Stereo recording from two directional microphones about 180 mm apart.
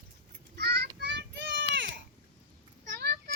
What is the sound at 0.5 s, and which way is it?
Child singing, 65° right (ahead or behind).